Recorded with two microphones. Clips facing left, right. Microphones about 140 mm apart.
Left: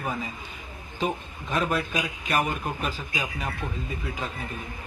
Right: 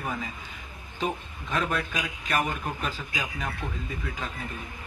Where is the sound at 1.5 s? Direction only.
20° left (ahead or behind).